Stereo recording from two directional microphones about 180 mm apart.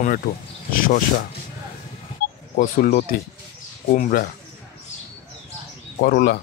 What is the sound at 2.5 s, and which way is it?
Speech, 55° left (ahead or behind).